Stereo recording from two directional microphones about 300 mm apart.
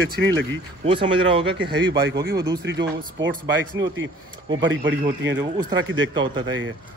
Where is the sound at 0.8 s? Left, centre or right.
Centre.